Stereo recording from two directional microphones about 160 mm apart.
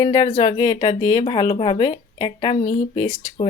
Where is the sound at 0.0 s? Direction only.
25° left (ahead or behind).